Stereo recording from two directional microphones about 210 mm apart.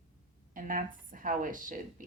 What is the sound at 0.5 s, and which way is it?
Speech, 40° right (ahead or behind).